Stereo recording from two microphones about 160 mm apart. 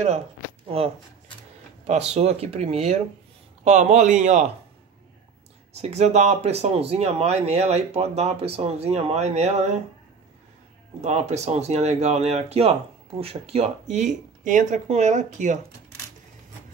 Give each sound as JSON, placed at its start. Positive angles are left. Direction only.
{"t": 0.7, "sound": "speech", "side_deg": -35}
{"t": 2.1, "sound": "speech", "side_deg": -40}
{"t": 5.8, "sound": "speech", "side_deg": -45}
{"t": 11.0, "sound": "speech", "side_deg": -45}